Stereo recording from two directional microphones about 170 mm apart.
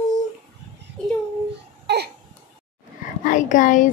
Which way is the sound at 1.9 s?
80° right.